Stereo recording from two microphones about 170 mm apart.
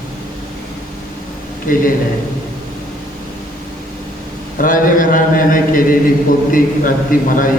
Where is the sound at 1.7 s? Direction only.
55° left (ahead or behind).